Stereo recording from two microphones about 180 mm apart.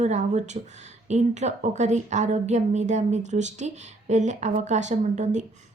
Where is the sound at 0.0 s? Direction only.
40° right (ahead or behind).